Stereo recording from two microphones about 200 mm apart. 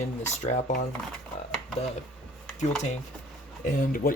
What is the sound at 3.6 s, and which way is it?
Speech, 40° left (ahead or behind).